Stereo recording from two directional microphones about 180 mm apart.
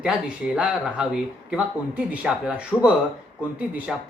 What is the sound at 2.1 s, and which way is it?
Speech, 5° right (ahead or behind).